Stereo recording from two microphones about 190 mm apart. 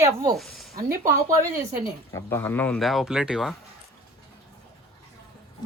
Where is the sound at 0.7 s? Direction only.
15° right (ahead or behind).